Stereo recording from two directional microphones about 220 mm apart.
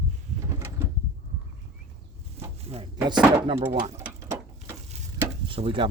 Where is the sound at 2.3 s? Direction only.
25° right (ahead or behind).